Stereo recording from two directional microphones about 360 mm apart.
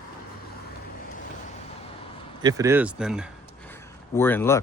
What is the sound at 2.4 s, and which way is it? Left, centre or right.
Speech, centre.